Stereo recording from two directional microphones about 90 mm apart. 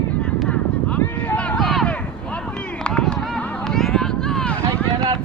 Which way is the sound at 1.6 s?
Centre (ahead or behind).